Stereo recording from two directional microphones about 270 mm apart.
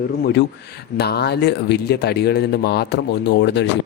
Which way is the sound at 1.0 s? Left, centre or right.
Left.